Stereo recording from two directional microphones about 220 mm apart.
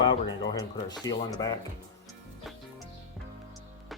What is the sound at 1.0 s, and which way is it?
Speech, 15° left (ahead or behind).